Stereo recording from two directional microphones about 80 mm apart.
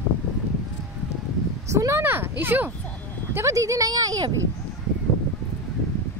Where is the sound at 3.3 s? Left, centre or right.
Right.